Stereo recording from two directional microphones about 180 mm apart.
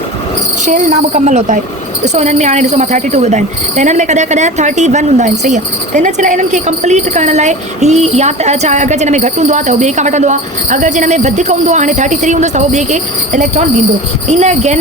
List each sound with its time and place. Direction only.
0.6 s speech: 40° right (ahead or behind)